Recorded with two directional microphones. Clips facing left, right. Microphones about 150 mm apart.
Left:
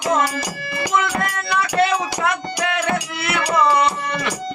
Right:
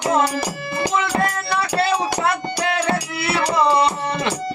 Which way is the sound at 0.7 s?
30° right (ahead or behind).